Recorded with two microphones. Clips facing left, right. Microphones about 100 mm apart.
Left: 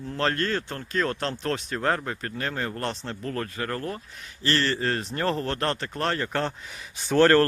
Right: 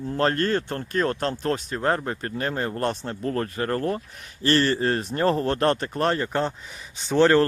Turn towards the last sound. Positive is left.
turn(degrees=-10)  # may be behind; listen again after turning